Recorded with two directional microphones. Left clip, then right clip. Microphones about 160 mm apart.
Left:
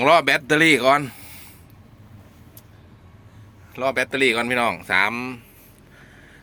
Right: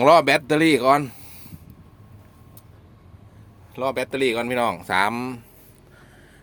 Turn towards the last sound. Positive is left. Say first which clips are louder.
# left 1 dB
turn(degrees=-40)  # may be behind; listen again after turning